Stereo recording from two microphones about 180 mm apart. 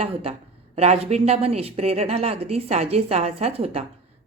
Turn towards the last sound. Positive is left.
turn(degrees=-35)  # may be behind; listen again after turning